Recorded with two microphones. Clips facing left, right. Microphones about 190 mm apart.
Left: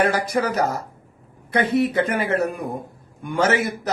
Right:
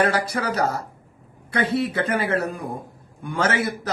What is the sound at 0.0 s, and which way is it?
A man's voice, 15° left (ahead or behind).